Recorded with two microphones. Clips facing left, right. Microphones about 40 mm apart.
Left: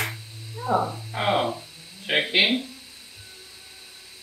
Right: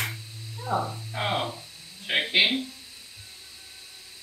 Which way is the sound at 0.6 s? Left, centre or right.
Left.